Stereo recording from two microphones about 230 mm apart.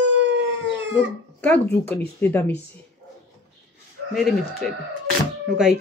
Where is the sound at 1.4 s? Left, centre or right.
Centre.